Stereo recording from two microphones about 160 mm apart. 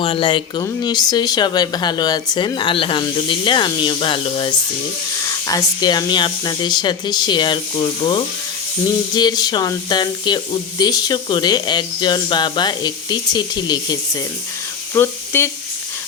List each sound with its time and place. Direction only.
0.0 s speech: 35° left (ahead or behind); by 15.4 s 15° left (ahead or behind)